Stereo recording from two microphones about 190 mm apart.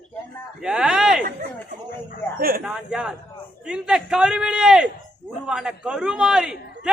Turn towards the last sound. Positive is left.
turn(degrees=-5)  # may be behind; listen again after turning